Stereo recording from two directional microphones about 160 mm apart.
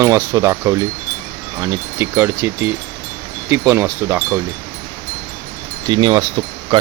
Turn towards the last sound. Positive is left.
turn(degrees=-25)  # may be behind; listen again after turning